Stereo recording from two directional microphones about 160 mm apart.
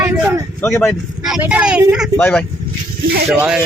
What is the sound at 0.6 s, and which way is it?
Speech, 15° left (ahead or behind).